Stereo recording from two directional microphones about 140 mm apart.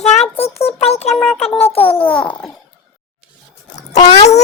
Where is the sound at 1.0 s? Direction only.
Centre (ahead or behind).